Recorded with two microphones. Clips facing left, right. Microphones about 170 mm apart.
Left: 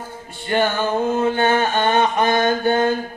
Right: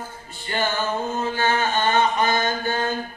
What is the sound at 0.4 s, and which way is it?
Music, 55° left (ahead or behind).